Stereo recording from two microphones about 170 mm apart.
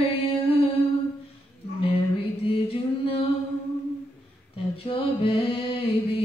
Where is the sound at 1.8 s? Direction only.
35° left (ahead or behind).